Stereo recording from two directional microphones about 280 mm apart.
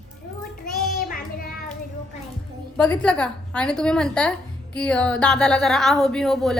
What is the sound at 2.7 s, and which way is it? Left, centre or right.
A woman's voice, centre.